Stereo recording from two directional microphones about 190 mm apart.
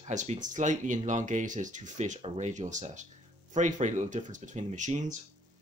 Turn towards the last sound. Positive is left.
turn(degrees=-40)  # may be behind; listen again after turning